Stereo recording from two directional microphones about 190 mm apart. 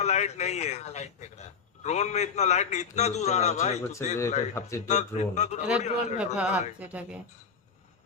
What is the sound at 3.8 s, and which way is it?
Speech, 15° left (ahead or behind).